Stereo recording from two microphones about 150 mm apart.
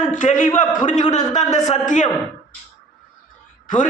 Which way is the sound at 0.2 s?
55° left (ahead or behind).